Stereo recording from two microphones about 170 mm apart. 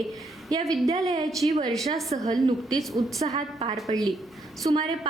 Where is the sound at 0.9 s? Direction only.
20° right (ahead or behind).